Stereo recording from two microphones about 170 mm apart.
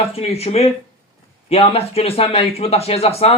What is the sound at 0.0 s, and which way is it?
Speech, 35° left (ahead or behind).